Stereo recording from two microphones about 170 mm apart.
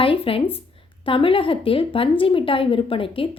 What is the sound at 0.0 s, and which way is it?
A woman's voice, 30° left (ahead or behind).